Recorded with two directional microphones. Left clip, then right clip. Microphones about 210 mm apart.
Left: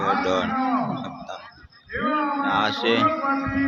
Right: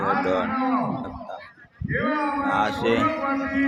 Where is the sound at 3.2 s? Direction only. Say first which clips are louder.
Left 1 dB; 50° right (ahead or behind).